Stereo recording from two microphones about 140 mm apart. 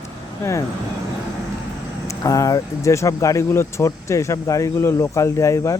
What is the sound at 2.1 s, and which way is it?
Speech, 25° left (ahead or behind).